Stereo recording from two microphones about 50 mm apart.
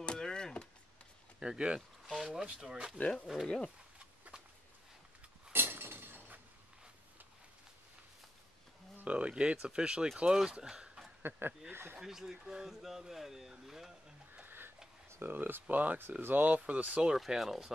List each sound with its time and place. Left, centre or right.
0.0 s a sound: centre
1.4 s speech: centre
2.0 s a sound: centre
2.5 s speech: centre
3.0 s speech: left
5.5 s chink: right
8.9 s a sound: right
9.3 s speech: centre
11.2 s speech: right
12.0 s speech: centre
14.4 s a sound: right
15.3 s speech: right
16.6 s speech: right
17.3 s speech: centre